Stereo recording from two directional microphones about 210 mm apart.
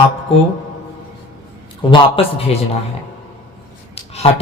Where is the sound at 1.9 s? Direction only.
25° left (ahead or behind).